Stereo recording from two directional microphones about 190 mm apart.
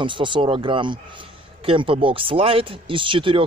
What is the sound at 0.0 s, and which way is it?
Speech, 25° right (ahead or behind).